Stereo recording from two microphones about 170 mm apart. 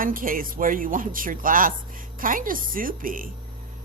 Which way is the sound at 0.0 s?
55° right (ahead or behind).